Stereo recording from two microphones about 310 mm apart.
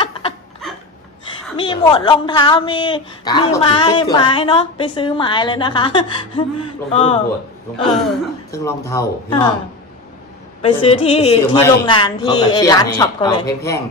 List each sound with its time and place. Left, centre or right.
1.6 s a woman's voice: centre
8.5 s a woman's voice: centre
10.6 s a woman's voice: centre